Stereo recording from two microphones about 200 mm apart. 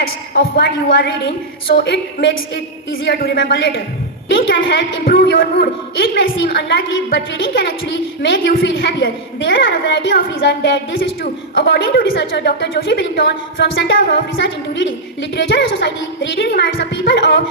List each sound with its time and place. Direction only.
0.3 s a woman's voice: 50° left (ahead or behind)
7.9 s a woman's voice: 60° left (ahead or behind)